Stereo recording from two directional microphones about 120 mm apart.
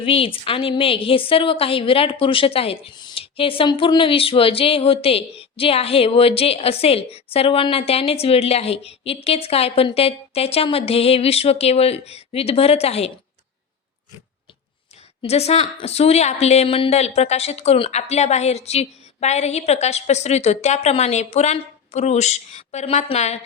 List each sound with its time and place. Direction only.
0.0 s a woman's voice: 50° left (ahead or behind)
2.9 s speech: 40° left (ahead or behind); by 13.1 s 60° left (ahead or behind)
15.3 s speech: 60° left (ahead or behind)
17.9 s a woman's voice: 65° left (ahead or behind)